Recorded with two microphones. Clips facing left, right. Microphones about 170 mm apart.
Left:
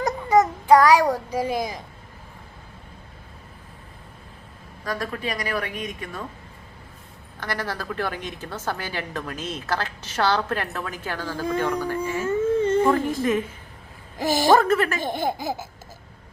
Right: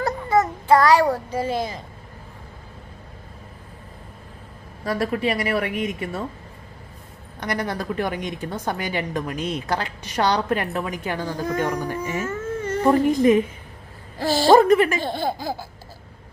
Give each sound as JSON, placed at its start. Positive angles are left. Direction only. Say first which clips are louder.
{"t": 0.0, "sound": "child singing", "louder": "left 1 dB", "side_deg": 15}
{"t": 1.1, "sound": "a child's voice", "louder": "even", "side_deg": 15}
{"t": 4.9, "sound": "speech", "louder": "right 6 dB", "side_deg": -25}
{"t": 7.3, "sound": "a woman's voice", "louder": "right 4 dB", "side_deg": -20}
{"t": 12.2, "sound": "a sound", "louder": "left 6 dB", "side_deg": 25}
{"t": 12.9, "sound": "a woman's voice", "louder": "right 5 dB", "side_deg": -15}
{"t": 14.2, "sound": "a child's voice", "louder": "right 2 dB", "side_deg": 15}
{"t": 14.5, "sound": "a woman's voice", "louder": "right 6 dB", "side_deg": -15}
{"t": 15.0, "sound": "a child's voice", "louder": "even", "side_deg": 15}